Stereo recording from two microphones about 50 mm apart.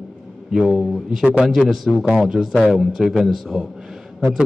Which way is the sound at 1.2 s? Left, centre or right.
Centre.